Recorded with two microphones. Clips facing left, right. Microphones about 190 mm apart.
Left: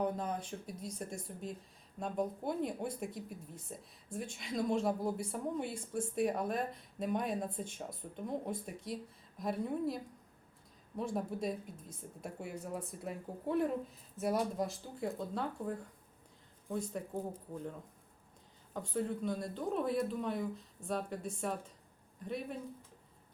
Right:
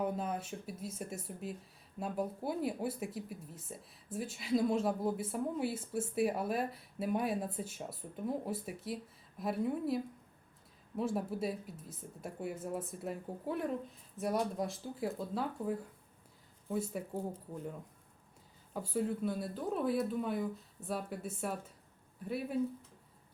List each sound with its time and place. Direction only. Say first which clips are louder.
0.0 s speech: even; 5° right (ahead or behind)
18.7 s speech: right 2 dB; 5° right (ahead or behind)